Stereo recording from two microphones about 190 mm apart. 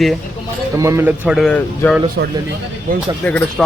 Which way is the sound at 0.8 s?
15° right (ahead or behind).